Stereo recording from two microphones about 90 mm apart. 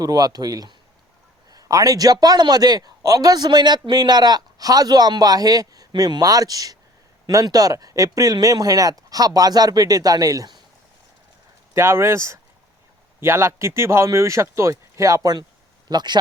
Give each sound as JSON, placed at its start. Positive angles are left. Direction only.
{"t": 0.0, "sound": "a man's voice", "side_deg": -45}
{"t": 11.7, "sound": "speech", "side_deg": -30}
{"t": 15.9, "sound": "a man's voice", "side_deg": -55}